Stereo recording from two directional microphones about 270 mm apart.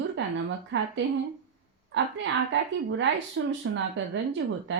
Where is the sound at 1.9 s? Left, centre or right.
Right.